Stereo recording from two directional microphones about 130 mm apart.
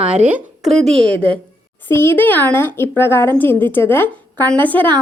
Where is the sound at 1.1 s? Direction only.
10° left (ahead or behind).